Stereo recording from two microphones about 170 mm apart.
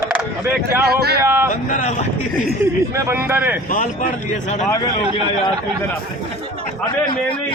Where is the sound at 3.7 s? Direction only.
50° left (ahead or behind).